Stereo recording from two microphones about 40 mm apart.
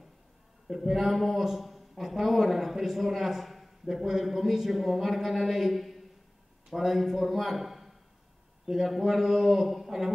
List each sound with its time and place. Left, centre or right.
0.7 s a man's voice: centre